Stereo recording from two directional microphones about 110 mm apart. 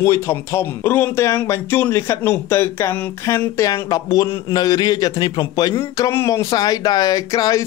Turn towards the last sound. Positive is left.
turn(degrees=35)  # may be behind; listen again after turning